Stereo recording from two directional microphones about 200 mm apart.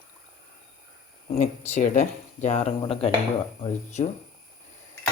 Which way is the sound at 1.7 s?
40° left (ahead or behind).